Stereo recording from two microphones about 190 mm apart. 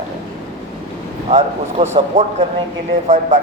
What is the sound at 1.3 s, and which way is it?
A man's voice, 35° right (ahead or behind).